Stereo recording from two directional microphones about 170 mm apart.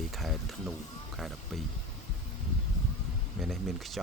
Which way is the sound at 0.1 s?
Centre (ahead or behind).